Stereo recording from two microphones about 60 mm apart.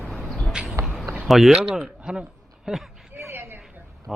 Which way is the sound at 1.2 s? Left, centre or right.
Centre.